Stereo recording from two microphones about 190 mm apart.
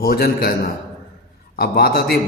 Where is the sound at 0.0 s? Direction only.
55° left (ahead or behind).